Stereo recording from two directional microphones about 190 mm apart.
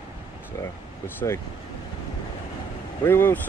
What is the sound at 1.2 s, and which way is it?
Speech, 20° left (ahead or behind).